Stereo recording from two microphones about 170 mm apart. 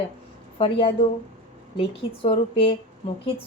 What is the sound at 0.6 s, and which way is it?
Speech, 35° left (ahead or behind).